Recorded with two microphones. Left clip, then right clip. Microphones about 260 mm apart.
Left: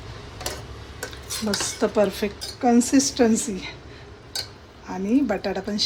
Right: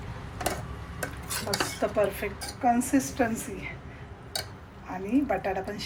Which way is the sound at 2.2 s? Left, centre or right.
Left.